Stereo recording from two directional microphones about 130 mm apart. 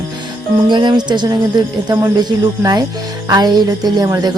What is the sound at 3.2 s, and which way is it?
Speech, 30° right (ahead or behind).